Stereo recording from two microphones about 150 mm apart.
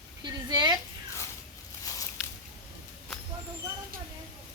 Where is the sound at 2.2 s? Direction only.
5° right (ahead or behind).